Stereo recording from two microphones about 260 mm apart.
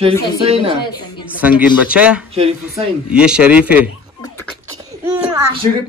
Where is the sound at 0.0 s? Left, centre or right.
Right.